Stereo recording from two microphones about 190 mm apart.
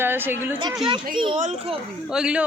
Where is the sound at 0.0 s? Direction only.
10° right (ahead or behind).